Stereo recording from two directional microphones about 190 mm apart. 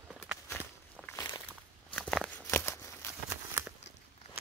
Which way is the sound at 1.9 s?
Centre (ahead or behind).